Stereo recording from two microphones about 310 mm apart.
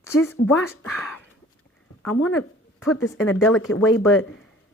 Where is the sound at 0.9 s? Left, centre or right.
Centre.